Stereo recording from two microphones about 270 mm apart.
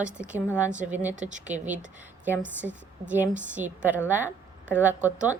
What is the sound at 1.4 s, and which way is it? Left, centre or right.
A woman's voice, centre.